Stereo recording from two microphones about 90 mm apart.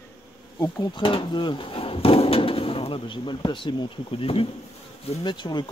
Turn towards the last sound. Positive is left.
turn(degrees=55)  # may be behind; listen again after turning